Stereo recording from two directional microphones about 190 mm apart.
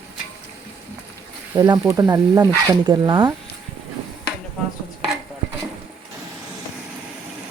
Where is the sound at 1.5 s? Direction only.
20° right (ahead or behind).